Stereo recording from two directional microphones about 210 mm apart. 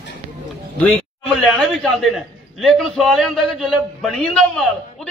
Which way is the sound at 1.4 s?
Centre (ahead or behind).